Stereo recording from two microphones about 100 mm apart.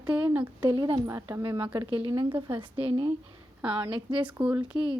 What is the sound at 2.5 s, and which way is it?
Speech, 65° right (ahead or behind).